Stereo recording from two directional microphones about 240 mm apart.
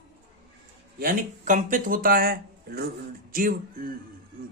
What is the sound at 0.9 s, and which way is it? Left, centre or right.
A man's voice, right.